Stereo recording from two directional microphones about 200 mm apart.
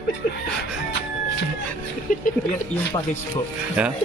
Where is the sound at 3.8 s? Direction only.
5° right (ahead or behind).